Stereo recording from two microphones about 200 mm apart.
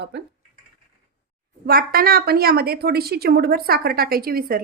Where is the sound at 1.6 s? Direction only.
45° right (ahead or behind).